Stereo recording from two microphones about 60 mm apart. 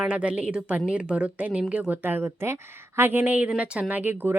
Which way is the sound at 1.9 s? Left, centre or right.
Right.